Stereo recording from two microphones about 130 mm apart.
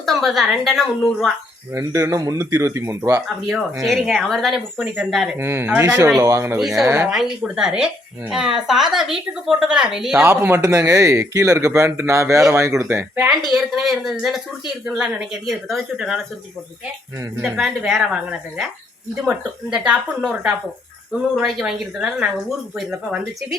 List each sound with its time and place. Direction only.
0.0 s a woman's voice: centre (ahead or behind)
1.7 s speech: 20° right (ahead or behind)
3.8 s a woman's voice: centre (ahead or behind)
5.4 s speech: 20° right (ahead or behind)
6.6 s a woman's voice: centre (ahead or behind)
6.8 s speech: 20° right (ahead or behind)
7.1 s a woman's voice: 5° right (ahead or behind)
10.2 s speech: 20° right (ahead or behind)
13.2 s a woman's voice: centre (ahead or behind)
17.6 s a woman's voice: centre (ahead or behind)